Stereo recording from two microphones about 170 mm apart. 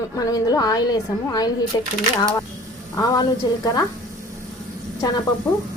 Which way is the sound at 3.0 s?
20° left (ahead or behind).